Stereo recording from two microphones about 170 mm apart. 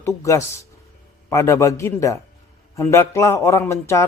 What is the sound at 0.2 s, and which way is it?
A man's voice, 15° left (ahead or behind).